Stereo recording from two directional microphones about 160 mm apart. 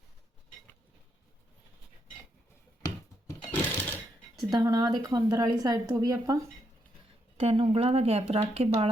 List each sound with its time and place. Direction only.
3.2 s sewing machine: 15° left (ahead or behind)
4.4 s a woman's voice: 25° right (ahead or behind)
7.3 s speech: 35° right (ahead or behind)